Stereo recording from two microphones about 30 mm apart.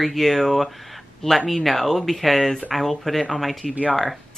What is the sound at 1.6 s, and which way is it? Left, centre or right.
Speech, centre.